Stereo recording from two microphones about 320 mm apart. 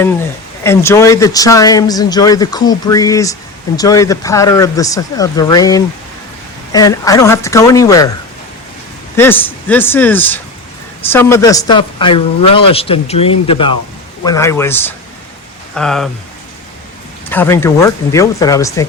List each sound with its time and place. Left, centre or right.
0.0 s speech: centre
9.1 s speech: centre
17.2 s speech: centre